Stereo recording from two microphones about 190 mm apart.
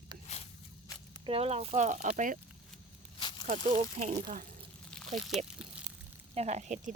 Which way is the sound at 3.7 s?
40° right (ahead or behind).